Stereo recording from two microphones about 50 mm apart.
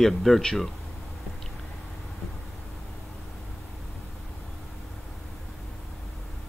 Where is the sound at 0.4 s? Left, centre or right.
Centre.